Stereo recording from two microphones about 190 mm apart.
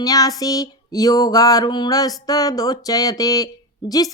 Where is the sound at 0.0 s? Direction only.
20° left (ahead or behind).